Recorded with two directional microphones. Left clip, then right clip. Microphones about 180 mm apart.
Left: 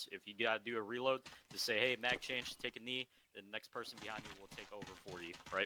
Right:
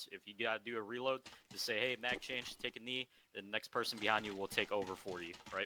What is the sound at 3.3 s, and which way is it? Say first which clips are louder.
Speech: right 7 dB; 40° right (ahead or behind).